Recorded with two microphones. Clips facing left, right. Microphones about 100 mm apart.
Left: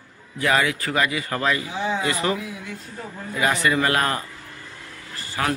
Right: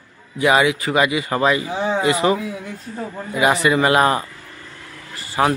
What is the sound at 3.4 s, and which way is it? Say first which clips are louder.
Speech: right 5 dB; 15° right (ahead or behind).